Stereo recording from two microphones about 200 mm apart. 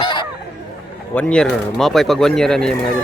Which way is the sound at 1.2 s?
5° left (ahead or behind).